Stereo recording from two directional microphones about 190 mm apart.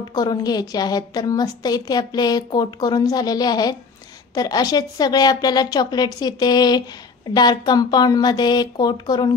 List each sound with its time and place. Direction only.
0.1 s a woman's voice: 20° left (ahead or behind)